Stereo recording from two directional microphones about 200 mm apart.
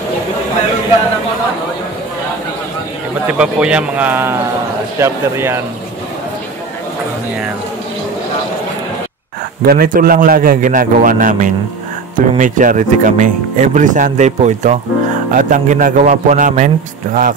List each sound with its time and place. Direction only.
3.3 s a man's voice: 5° right (ahead or behind)
9.7 s a man's voice: 45° right (ahead or behind)